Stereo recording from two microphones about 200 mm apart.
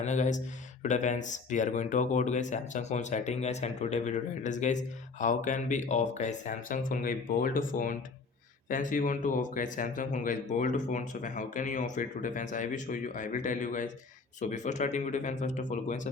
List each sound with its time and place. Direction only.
0.0 s speech: 40° left (ahead or behind)